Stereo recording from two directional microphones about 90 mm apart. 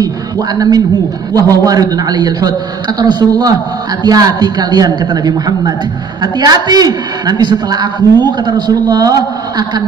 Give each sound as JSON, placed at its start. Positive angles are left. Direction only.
{"t": 0.6, "sound": "a man's voice", "side_deg": -45}